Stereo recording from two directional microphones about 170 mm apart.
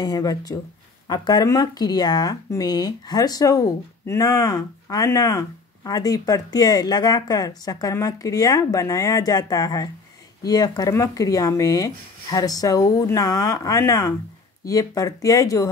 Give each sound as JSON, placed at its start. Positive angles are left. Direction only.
{"t": 0.0, "sound": "speech", "side_deg": 20}